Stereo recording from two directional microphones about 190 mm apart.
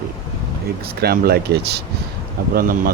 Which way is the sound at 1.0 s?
55° right (ahead or behind).